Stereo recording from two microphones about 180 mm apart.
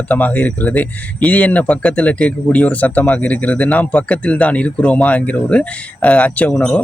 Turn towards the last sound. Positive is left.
turn(degrees=5)  # may be behind; listen again after turning